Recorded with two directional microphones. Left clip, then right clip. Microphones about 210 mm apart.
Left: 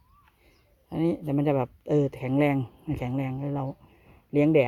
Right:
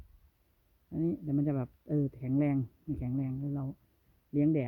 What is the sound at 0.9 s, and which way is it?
Speech, 25° right (ahead or behind).